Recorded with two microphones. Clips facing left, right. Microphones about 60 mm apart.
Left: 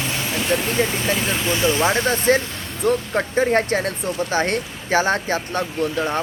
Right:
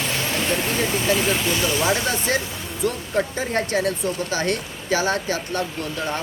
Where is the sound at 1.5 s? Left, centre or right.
Left.